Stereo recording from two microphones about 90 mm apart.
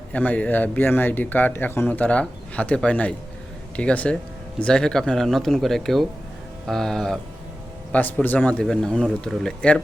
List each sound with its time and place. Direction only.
0.1 s speech: 20° left (ahead or behind)
7.9 s speech: 20° left (ahead or behind)
8.6 s speech: 5° left (ahead or behind)